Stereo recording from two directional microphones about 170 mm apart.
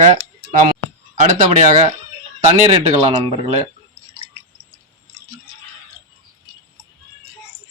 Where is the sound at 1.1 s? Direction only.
40° right (ahead or behind).